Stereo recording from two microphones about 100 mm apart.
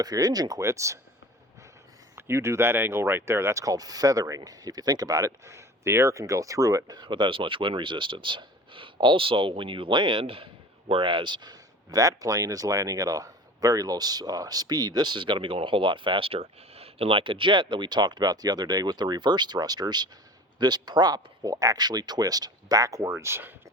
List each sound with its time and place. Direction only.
0.0 s speech: 40° right (ahead or behind)
2.1 s speech: 25° right (ahead or behind)